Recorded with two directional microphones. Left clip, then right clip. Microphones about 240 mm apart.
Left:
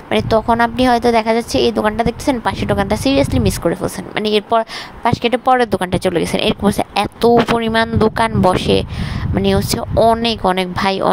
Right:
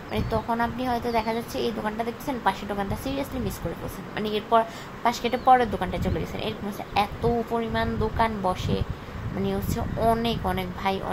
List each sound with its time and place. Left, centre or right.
0.1 s a woman's voice: left